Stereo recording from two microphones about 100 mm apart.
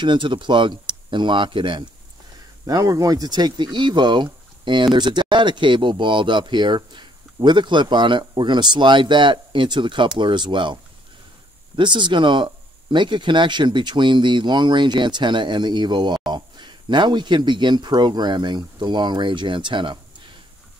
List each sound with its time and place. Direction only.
0.0 s speech: 55° right (ahead or behind)
2.6 s speech: 35° right (ahead or behind); by 20.0 s 55° right (ahead or behind)